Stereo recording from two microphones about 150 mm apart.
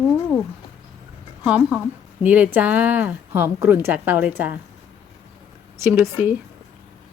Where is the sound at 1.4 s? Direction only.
5° right (ahead or behind).